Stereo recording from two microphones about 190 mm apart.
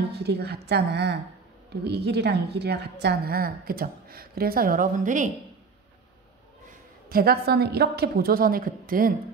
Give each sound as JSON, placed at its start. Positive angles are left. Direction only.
{"t": 0.1, "sound": "a woman's voice", "side_deg": -60}
{"t": 7.1, "sound": "a woman's voice", "side_deg": -55}